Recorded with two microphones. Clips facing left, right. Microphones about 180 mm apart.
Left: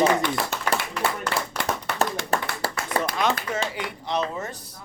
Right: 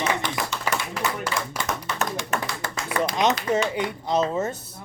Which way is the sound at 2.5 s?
60° left (ahead or behind).